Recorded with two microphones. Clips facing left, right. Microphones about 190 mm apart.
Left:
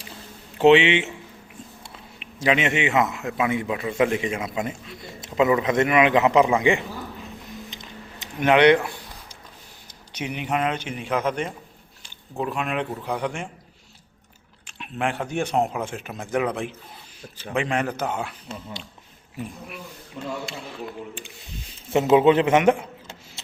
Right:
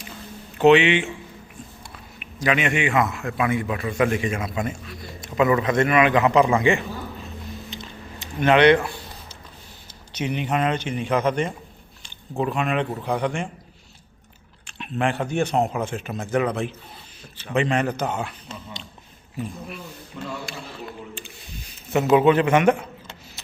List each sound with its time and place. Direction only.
0.6 s a man's voice: 25° left (ahead or behind)
2.1 s a man's voice: 25° left (ahead or behind)
7.7 s a sound: 15° left (ahead or behind)
10.1 s speech: 10° left (ahead or behind)
14.7 s speech: 10° left (ahead or behind)
20.1 s a man's voice: 25° left (ahead or behind)